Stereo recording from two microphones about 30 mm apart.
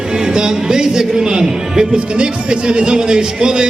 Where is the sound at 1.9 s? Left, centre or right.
Right.